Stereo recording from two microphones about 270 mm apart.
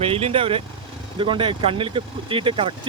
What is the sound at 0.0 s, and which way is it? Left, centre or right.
Speech, right.